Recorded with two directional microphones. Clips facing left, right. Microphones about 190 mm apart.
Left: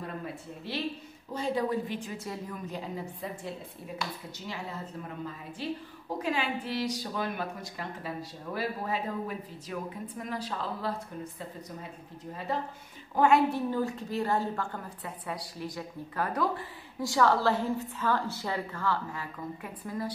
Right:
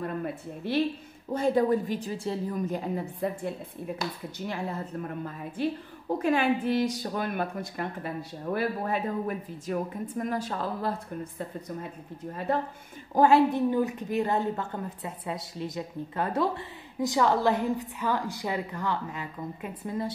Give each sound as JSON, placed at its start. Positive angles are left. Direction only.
{"t": 0.0, "sound": "a woman's voice", "side_deg": -55}
{"t": 2.7, "sound": "a woman's voice", "side_deg": -55}
{"t": 13.1, "sound": "a woman's voice", "side_deg": -35}
{"t": 13.5, "sound": "a woman's voice", "side_deg": -15}